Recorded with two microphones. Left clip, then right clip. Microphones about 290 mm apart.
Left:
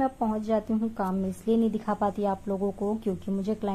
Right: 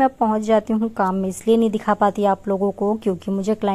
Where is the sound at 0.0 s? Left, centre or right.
Right.